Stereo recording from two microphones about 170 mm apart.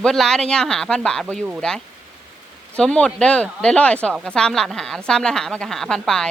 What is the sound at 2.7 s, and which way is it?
Speech, 5° left (ahead or behind).